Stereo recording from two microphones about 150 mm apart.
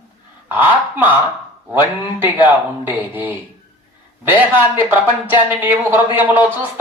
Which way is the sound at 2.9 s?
10° right (ahead or behind).